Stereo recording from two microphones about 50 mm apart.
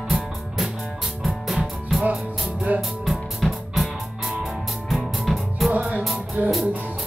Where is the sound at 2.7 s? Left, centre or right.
Right.